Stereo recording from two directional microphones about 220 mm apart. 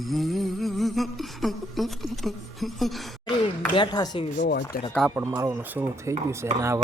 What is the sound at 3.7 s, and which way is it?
Speech, 20° left (ahead or behind).